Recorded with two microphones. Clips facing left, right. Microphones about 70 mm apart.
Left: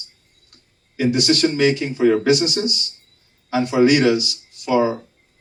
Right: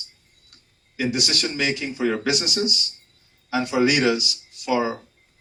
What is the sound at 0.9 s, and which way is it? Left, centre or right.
Speech, left.